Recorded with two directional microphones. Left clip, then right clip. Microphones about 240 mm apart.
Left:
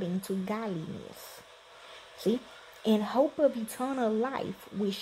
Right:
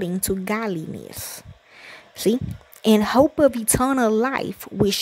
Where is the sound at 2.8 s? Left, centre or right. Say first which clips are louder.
Right 10 dB; right.